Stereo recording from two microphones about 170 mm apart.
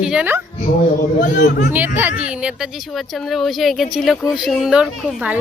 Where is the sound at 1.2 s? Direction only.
50° left (ahead or behind).